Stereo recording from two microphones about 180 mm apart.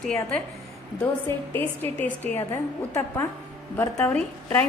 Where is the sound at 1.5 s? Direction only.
10° left (ahead or behind).